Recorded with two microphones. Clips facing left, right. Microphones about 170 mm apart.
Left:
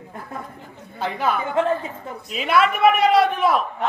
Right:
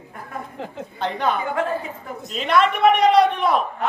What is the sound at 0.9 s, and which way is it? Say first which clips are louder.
A man's voice: even; 5° left (ahead or behind).